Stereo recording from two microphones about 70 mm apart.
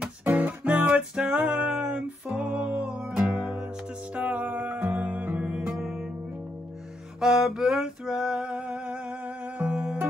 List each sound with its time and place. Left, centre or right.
0.2 s music: right
7.2 s a sound: centre
9.6 s music: centre